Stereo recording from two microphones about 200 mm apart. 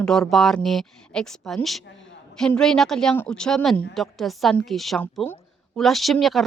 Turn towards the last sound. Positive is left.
turn(degrees=0)  # may be behind; listen again after turning